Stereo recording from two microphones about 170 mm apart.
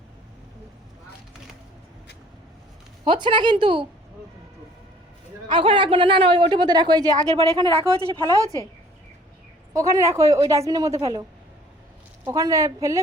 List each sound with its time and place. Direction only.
3.0 s a woman's voice: 30° right (ahead or behind)
5.5 s a woman's voice: 30° right (ahead or behind)
9.7 s a woman's voice: 20° right (ahead or behind)
12.2 s a woman's voice: 20° right (ahead or behind)